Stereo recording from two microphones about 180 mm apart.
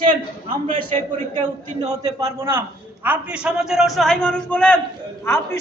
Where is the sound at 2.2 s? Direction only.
15° right (ahead or behind).